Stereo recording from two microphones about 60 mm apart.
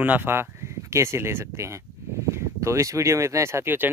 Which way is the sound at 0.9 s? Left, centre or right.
Right.